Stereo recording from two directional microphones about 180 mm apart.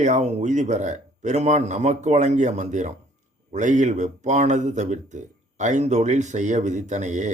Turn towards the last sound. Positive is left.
turn(degrees=-40)  # may be behind; listen again after turning